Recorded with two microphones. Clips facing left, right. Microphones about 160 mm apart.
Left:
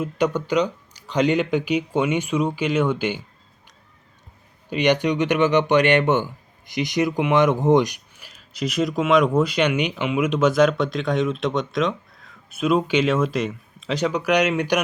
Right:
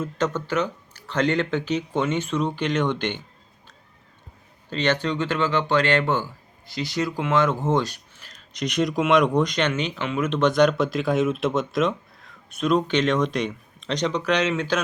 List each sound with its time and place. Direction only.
0.0 s speech: 10° left (ahead or behind)
4.7 s speech: 15° left (ahead or behind)